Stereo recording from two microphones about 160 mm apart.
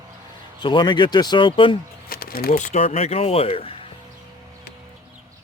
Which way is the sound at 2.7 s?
40° left (ahead or behind).